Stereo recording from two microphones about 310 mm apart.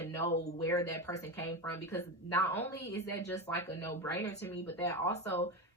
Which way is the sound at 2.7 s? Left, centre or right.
Left.